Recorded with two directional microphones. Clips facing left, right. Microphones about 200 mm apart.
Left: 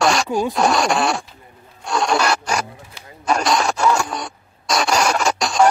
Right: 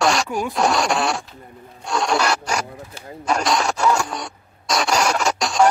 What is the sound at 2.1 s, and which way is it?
Filing, 65° left (ahead or behind).